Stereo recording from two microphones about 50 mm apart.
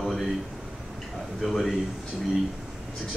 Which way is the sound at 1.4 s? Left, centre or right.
Centre.